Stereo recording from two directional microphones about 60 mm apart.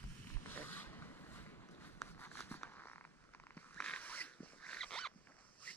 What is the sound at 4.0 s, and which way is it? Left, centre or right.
Dog, left.